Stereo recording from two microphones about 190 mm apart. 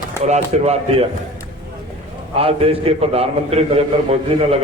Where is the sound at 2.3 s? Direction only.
30° right (ahead or behind).